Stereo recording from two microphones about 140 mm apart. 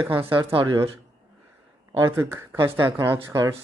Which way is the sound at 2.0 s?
30° right (ahead or behind).